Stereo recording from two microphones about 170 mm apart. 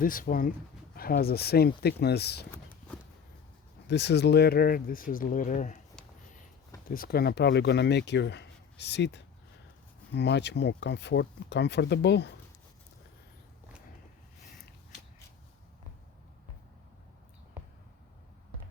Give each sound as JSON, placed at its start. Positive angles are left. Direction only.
{"t": 0.0, "sound": "speech", "side_deg": 55}
{"t": 3.8, "sound": "speech", "side_deg": 90}
{"t": 6.9, "sound": "speech", "side_deg": 60}